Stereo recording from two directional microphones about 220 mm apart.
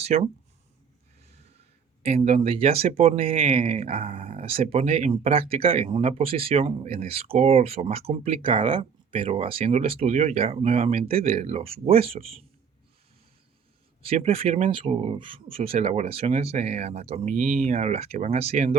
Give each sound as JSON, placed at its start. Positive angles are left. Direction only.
{"t": 0.0, "sound": "speech", "side_deg": -30}
{"t": 2.0, "sound": "speech", "side_deg": -30}
{"t": 14.0, "sound": "speech", "side_deg": -25}